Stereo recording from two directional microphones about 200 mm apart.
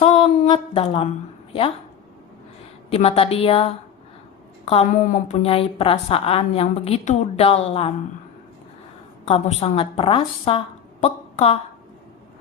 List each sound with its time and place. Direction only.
0.0 s a sound: 25° left (ahead or behind)
2.9 s a woman's voice: 30° left (ahead or behind)
9.2 s a woman's voice: 30° left (ahead or behind)